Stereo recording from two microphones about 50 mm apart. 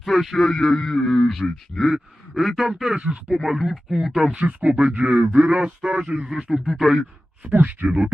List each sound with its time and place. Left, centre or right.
0.0 s a man's voice: centre
0.5 s speech: centre
3.0 s speech: right
3.2 s speech: centre
4.4 s speech: right
6.0 s speech: centre
7.4 s speech: right